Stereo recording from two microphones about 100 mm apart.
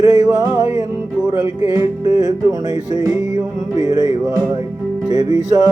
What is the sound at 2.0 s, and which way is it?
Music, 40° right (ahead or behind).